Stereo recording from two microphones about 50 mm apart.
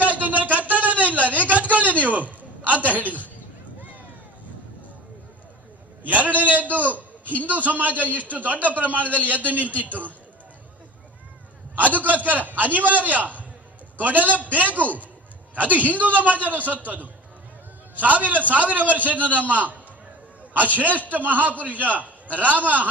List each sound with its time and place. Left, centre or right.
0.0 s a sound: right
6.0 s a man's voice: right
11.8 s a man's voice: right